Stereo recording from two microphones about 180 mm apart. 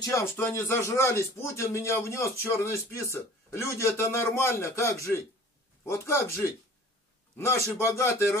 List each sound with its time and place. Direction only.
0.0 s speech: 15° left (ahead or behind)